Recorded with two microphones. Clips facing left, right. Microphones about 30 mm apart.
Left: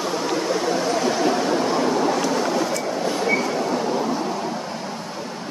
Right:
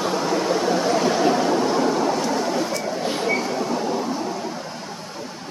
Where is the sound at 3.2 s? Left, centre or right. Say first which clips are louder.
Left 2 dB; centre.